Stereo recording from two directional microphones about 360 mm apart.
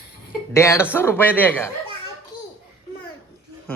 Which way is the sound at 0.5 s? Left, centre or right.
Centre.